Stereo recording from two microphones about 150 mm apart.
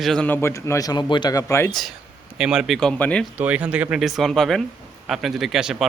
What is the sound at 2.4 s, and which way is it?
Speech, 5° right (ahead or behind).